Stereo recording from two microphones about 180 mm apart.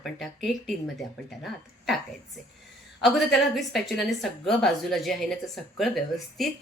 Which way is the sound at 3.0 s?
Centre (ahead or behind).